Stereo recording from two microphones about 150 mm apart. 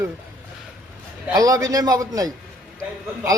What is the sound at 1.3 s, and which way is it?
A man's voice, 25° right (ahead or behind).